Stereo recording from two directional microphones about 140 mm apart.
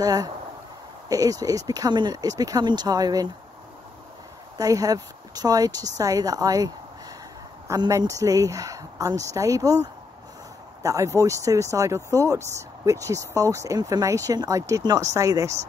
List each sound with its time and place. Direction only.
0.0 s speech: 25° right (ahead or behind)
4.6 s speech: 25° right (ahead or behind)
10.8 s speech: 20° right (ahead or behind)